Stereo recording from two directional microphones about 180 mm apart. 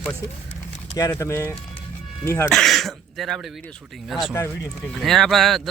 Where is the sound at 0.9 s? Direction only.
15° left (ahead or behind).